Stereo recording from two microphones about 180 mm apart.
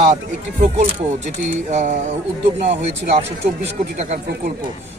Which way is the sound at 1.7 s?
45° right (ahead or behind).